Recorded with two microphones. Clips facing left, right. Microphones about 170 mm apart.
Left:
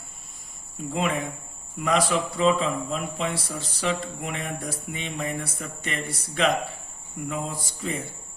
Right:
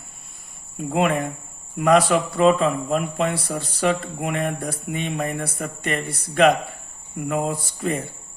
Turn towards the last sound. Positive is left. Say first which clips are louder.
# right 7 dB
turn(degrees=-65)  # may be behind; listen again after turning